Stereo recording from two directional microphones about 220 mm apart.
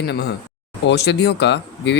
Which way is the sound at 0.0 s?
45° left (ahead or behind).